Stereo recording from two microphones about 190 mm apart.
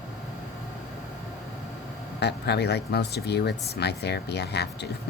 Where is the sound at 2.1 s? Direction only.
60° left (ahead or behind).